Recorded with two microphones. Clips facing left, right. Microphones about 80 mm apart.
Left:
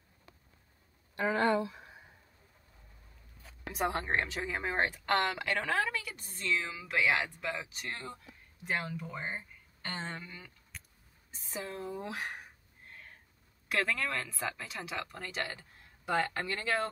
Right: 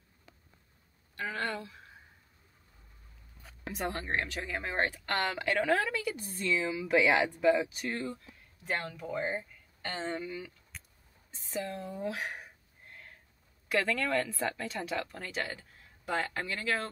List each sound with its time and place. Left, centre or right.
1.1 s speech: centre
3.7 s speech: centre
13.7 s speech: centre